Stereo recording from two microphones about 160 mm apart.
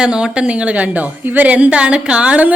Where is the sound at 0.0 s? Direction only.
5° right (ahead or behind).